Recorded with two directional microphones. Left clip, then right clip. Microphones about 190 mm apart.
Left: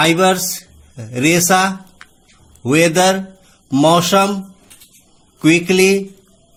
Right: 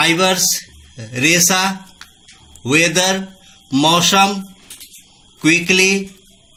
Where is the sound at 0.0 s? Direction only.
50° left (ahead or behind).